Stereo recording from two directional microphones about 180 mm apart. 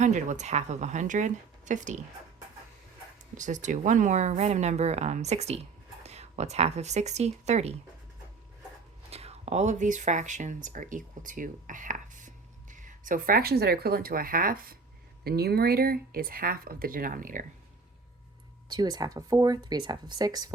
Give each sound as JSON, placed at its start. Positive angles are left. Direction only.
{"t": 0.0, "sound": "speech", "side_deg": -40}
{"t": 3.3, "sound": "speech", "side_deg": -45}
{"t": 9.0, "sound": "speech", "side_deg": -35}
{"t": 18.7, "sound": "speech", "side_deg": -25}